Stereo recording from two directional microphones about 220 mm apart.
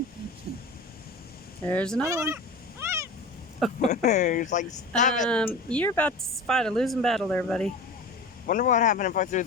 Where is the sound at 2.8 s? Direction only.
10° right (ahead or behind).